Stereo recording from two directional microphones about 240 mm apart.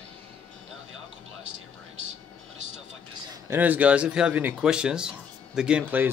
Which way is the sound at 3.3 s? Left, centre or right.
Centre.